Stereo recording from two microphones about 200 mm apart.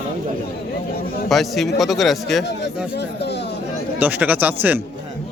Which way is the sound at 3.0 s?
55° left (ahead or behind).